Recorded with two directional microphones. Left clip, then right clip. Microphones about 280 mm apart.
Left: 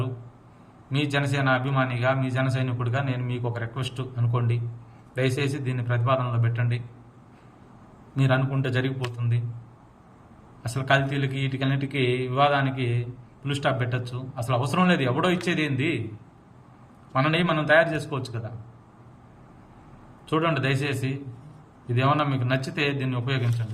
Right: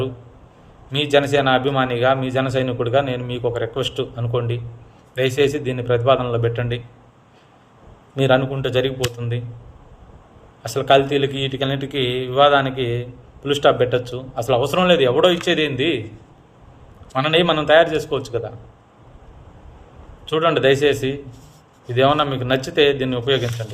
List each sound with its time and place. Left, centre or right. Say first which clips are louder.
0.9 s a man's voice: right 10 dB; centre
8.1 s a man's voice: right 9 dB; centre
10.6 s a man's voice: right 8 dB; centre
11.9 s mantra: right 3 dB; right
12.3 s a man's voice: right 9 dB; centre
12.7 s mantra: right 8 dB; right
13.4 s a man's voice: right 11 dB; centre
17.2 s a man's voice: right 7 dB; centre
20.2 s a man's voice: right 9 dB; centre